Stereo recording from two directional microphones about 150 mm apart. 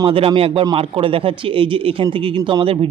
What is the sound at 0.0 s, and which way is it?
Speech, 35° right (ahead or behind).